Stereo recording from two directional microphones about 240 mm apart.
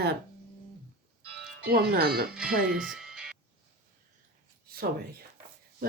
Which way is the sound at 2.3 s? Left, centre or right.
Centre.